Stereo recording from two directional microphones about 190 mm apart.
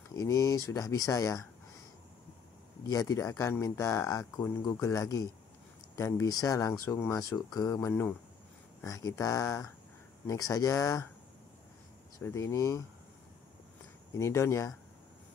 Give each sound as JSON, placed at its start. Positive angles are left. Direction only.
{"t": 0.1, "sound": "speech", "side_deg": 15}
{"t": 2.9, "sound": "speech", "side_deg": 15}
{"t": 12.2, "sound": "speech", "side_deg": 15}
{"t": 14.1, "sound": "speech", "side_deg": 15}